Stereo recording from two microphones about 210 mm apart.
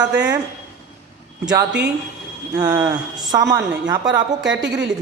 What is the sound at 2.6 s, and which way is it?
A man's voice, 15° right (ahead or behind).